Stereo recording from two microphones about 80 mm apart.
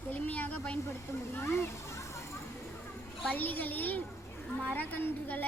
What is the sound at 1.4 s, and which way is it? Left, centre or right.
Speech, left.